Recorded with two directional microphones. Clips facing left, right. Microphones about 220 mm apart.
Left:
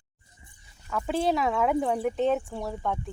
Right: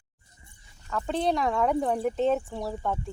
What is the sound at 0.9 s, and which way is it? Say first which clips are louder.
Speech: left 1 dB; 5° left (ahead or behind).